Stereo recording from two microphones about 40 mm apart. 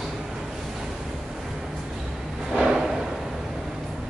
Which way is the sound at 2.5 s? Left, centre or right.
Centre.